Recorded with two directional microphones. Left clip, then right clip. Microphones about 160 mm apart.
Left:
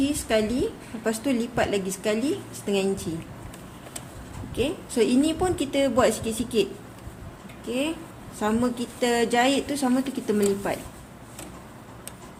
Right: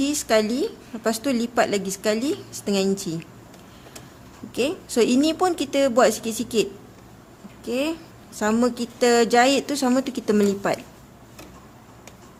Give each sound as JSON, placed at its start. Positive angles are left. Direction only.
{"t": 0.0, "sound": "a woman's voice", "side_deg": -70}
{"t": 4.5, "sound": "a woman's voice", "side_deg": -70}
{"t": 7.7, "sound": "a woman's voice", "side_deg": -65}